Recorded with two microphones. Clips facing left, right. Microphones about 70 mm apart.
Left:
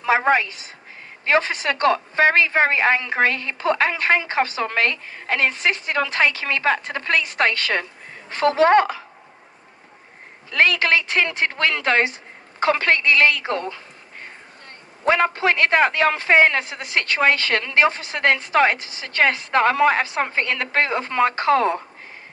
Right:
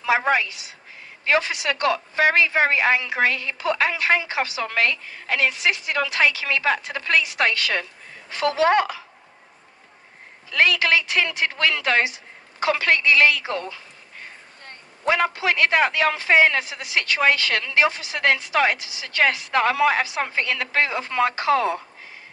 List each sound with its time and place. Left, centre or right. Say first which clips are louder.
0.0 s a man's voice: left 2 dB; left
10.5 s a woman's voice: left 1 dB; left